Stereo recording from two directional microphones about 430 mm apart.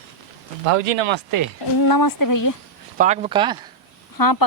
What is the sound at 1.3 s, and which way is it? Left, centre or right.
Speech, right.